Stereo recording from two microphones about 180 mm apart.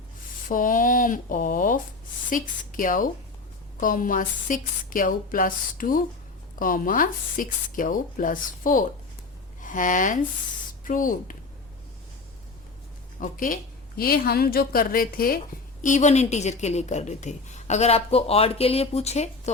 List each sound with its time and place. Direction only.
0.4 s speech: 50° left (ahead or behind)
13.1 s a woman's voice: 45° left (ahead or behind)
15.8 s a woman's voice: 45° left (ahead or behind)